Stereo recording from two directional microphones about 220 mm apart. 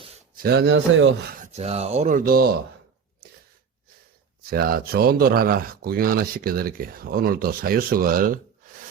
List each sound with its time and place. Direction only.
0.4 s speech: 50° right (ahead or behind)
1.3 s speech: 35° right (ahead or behind)
4.4 s speech: 45° right (ahead or behind)